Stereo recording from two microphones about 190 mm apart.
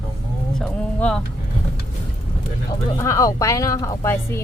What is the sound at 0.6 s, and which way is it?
Speech, 5° left (ahead or behind).